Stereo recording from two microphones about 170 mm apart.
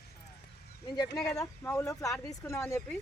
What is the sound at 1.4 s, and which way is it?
Speech, 15° left (ahead or behind).